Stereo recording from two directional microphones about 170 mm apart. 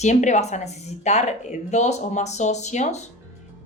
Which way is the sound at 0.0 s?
45° left (ahead or behind).